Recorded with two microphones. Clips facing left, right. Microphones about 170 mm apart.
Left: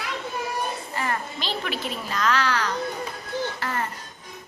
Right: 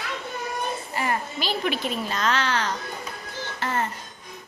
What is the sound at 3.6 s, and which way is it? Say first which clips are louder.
Music: right 2 dB; 25° right (ahead or behind).